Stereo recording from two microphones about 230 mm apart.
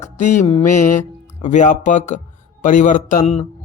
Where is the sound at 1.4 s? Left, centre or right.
Left.